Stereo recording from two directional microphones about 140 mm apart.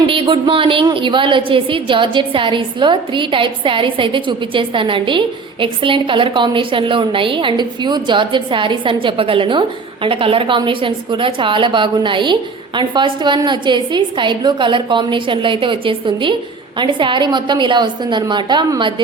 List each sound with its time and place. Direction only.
0.1 s a woman's voice: 40° right (ahead or behind)